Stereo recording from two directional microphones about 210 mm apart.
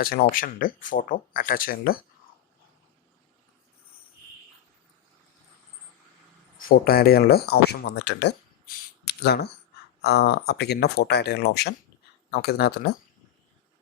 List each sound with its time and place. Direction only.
0.0 s speech: 45° left (ahead or behind)
6.6 s speech: 45° left (ahead or behind)